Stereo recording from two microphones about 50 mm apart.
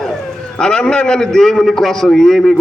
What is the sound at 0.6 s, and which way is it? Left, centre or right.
A man's voice, centre.